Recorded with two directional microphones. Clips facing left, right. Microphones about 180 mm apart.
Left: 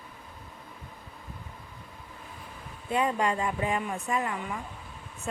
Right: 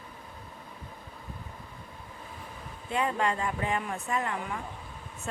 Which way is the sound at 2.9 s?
15° left (ahead or behind).